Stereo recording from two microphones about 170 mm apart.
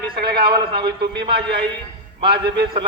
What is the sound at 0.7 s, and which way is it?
Speech, 75° right (ahead or behind).